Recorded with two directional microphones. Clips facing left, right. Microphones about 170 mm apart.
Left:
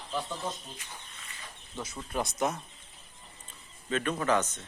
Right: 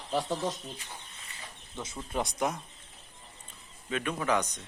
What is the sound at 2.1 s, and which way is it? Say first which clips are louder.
Speech: even; 15° right (ahead or behind).